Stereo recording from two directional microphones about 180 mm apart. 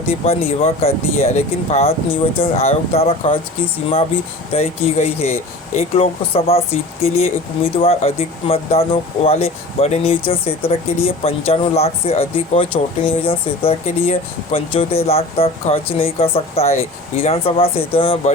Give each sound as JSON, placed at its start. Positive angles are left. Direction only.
{"t": 0.1, "sound": "speech", "side_deg": 35}
{"t": 4.5, "sound": "speech", "side_deg": 35}